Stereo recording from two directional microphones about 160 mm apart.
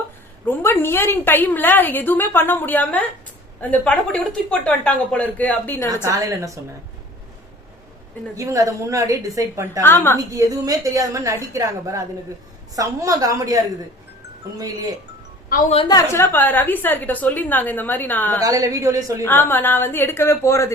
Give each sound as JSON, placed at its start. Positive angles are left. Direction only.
{"t": 0.4, "sound": "a woman's voice", "side_deg": 15}
{"t": 5.9, "sound": "a woman's voice", "side_deg": -20}
{"t": 8.4, "sound": "a woman's voice", "side_deg": -20}
{"t": 9.8, "sound": "a woman's voice", "side_deg": 15}
{"t": 10.3, "sound": "a woman's voice", "side_deg": -25}
{"t": 14.6, "sound": "a woman's voice", "side_deg": -20}
{"t": 15.7, "sound": "a woman's voice", "side_deg": 35}
{"t": 16.0, "sound": "a woman's voice", "side_deg": 15}
{"t": 18.4, "sound": "a woman's voice", "side_deg": -20}
{"t": 19.2, "sound": "a woman's voice", "side_deg": 15}